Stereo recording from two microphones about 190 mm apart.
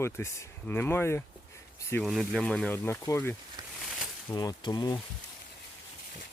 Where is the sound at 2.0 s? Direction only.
Centre (ahead or behind).